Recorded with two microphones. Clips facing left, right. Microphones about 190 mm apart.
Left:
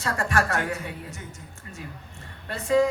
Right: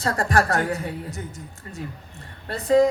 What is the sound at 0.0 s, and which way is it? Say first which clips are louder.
A woman's voice: right 4 dB; 35° right (ahead or behind).